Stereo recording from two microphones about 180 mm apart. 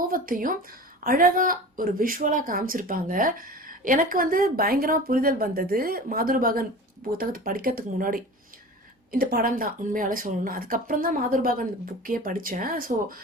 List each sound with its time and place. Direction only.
0.1 s speech: 50° right (ahead or behind)